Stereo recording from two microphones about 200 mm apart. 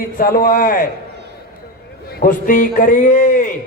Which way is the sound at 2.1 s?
45° left (ahead or behind).